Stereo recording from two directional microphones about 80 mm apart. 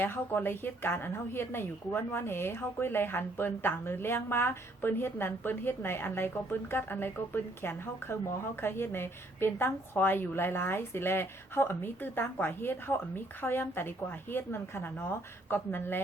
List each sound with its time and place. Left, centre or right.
0.0 s a woman's voice: left